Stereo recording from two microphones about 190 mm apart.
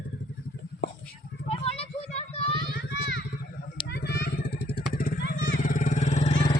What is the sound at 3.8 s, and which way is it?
Vehicle, 60° left (ahead or behind).